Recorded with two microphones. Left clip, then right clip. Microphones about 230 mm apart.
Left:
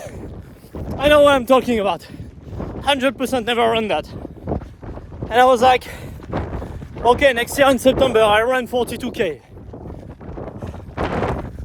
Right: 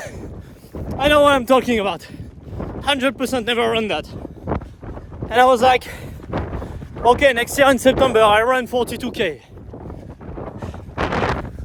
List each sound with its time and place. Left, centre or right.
0.9 s speech: centre
5.3 s speech: centre
10.4 s a sound: centre